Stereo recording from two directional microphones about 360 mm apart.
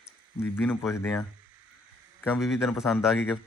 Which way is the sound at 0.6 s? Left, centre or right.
Centre.